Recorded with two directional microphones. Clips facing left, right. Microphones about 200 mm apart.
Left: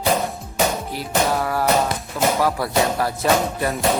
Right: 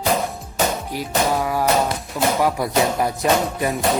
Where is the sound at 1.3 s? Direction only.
10° right (ahead or behind).